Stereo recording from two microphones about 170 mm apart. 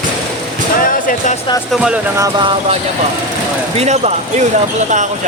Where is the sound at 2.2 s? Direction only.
25° right (ahead or behind).